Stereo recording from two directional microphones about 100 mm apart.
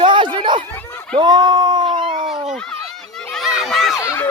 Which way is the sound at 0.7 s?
20° left (ahead or behind).